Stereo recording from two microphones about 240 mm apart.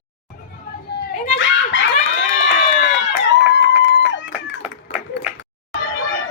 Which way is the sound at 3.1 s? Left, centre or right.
Left.